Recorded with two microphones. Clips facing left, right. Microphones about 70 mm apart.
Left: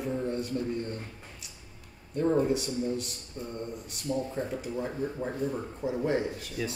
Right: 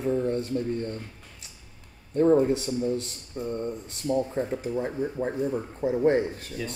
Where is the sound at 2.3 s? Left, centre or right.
Right.